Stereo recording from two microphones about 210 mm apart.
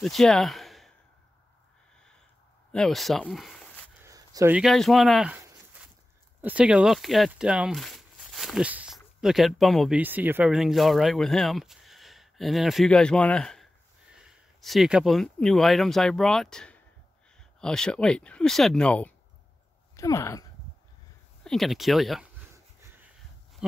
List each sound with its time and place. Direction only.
0.0 s speech: centre (ahead or behind)
2.7 s speech: centre (ahead or behind)
4.0 s a sound: 15° right (ahead or behind)
4.6 s speech: centre (ahead or behind)
6.4 s speech: 5° right (ahead or behind); by 20.4 s 15° left (ahead or behind)
21.5 s speech: centre (ahead or behind)